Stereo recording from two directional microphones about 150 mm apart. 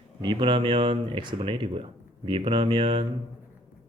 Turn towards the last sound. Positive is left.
turn(degrees=-35)  # may be behind; listen again after turning